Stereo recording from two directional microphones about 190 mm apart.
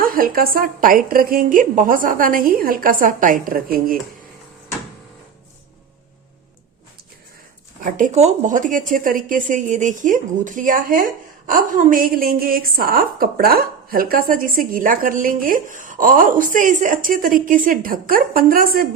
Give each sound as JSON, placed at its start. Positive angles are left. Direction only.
{"t": 0.0, "sound": "a woman's voice", "side_deg": -50}
{"t": 7.9, "sound": "a woman's voice", "side_deg": -40}